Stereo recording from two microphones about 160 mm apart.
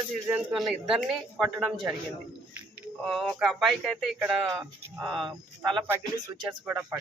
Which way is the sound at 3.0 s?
Centre (ahead or behind).